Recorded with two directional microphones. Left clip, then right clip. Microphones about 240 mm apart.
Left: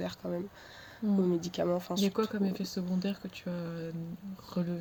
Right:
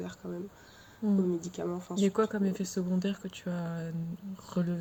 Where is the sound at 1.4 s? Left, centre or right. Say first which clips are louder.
Left 5 dB; left.